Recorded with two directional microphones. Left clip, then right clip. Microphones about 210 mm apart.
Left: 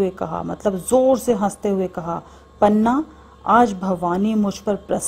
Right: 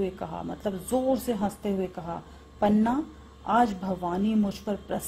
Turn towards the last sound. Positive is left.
turn(degrees=35)  # may be behind; listen again after turning